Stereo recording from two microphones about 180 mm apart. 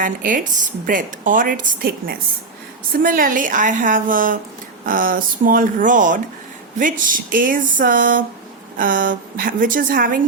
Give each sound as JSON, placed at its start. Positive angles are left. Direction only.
{"t": 0.0, "sound": "speech", "side_deg": -50}